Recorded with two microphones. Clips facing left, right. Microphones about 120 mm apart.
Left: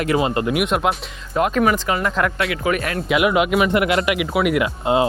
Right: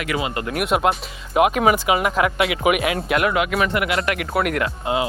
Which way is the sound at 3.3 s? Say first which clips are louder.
Left 3 dB; 20° left (ahead or behind).